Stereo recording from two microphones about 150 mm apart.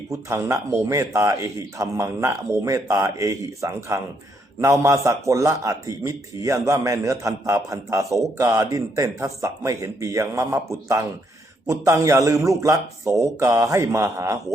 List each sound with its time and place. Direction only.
0.1 s a man's voice: 20° right (ahead or behind)